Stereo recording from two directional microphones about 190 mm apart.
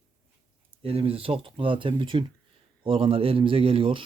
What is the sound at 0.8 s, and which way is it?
A man's voice, 30° right (ahead or behind).